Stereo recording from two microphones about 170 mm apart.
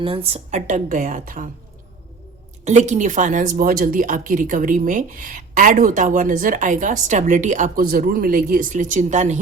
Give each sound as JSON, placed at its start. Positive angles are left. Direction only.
{"t": 0.0, "sound": "speech", "side_deg": -30}
{"t": 2.6, "sound": "speech", "side_deg": -45}